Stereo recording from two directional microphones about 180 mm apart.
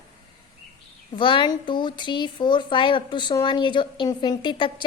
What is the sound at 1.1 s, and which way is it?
Speech, 25° left (ahead or behind).